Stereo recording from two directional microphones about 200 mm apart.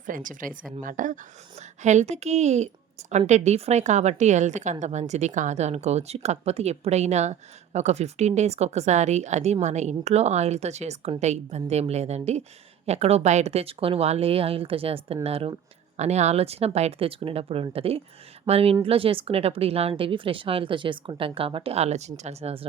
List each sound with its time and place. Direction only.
0.0 s a woman's voice: 40° right (ahead or behind)